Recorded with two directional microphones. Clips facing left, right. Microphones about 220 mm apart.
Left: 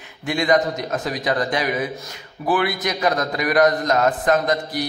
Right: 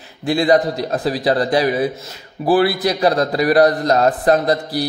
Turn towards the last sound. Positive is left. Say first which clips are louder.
# right 4 dB
turn(degrees=-35)  # may be behind; listen again after turning